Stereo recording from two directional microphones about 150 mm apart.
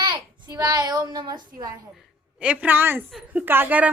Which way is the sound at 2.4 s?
10° right (ahead or behind).